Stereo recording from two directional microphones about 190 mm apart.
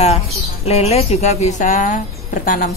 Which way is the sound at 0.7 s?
35° left (ahead or behind).